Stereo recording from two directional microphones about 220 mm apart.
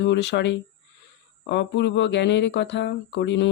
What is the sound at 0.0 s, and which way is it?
Speech, 55° left (ahead or behind).